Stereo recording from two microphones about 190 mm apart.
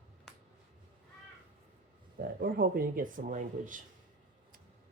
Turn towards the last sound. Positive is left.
turn(degrees=-45)  # may be behind; listen again after turning